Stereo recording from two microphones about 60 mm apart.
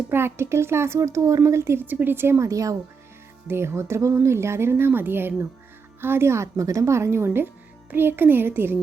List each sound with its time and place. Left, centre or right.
0.1 s speech: right
1.8 s a child's voice: right
2.4 s speech: right
3.4 s a child's voice: right